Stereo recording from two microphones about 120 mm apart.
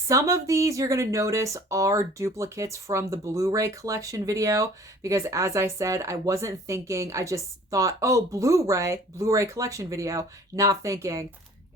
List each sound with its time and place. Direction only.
0.1 s speech: 25° right (ahead or behind)